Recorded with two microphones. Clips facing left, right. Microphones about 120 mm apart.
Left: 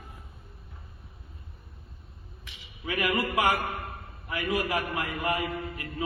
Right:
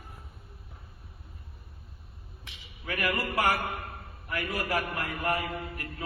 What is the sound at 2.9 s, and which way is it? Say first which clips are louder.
A man's voice: left 3 dB; 20° left (ahead or behind).